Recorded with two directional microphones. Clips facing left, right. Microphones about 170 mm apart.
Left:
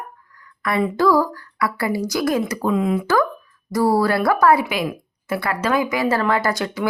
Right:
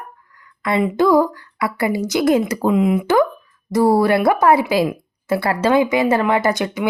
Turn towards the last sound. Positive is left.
turn(degrees=-20)  # may be behind; listen again after turning